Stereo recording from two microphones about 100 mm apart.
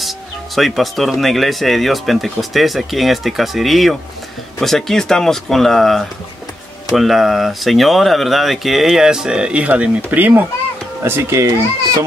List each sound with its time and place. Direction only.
0.6 s a child's voice: centre (ahead or behind); by 11.6 s 30° right (ahead or behind)